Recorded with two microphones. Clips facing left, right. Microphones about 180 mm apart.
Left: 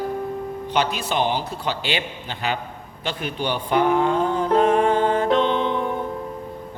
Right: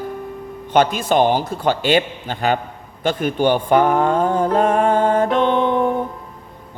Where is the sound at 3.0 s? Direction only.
45° right (ahead or behind).